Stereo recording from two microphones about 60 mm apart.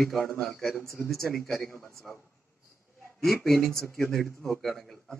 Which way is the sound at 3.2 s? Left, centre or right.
Centre.